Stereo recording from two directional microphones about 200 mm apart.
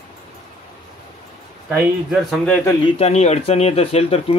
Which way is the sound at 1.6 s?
5° right (ahead or behind).